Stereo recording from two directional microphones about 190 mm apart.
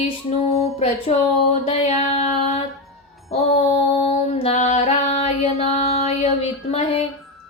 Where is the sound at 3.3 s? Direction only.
35° left (ahead or behind).